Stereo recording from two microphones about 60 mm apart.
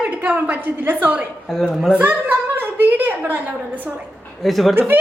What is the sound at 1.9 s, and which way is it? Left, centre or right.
A woman's voice, right.